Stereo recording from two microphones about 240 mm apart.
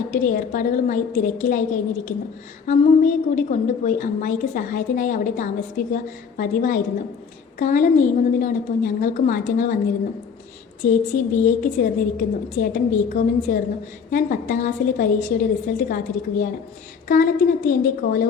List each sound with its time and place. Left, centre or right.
0.1 s a woman's voice: left
10.8 s a woman's voice: left
17.7 s a woman's voice: left